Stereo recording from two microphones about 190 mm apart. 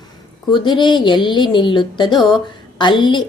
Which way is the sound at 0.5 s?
25° left (ahead or behind).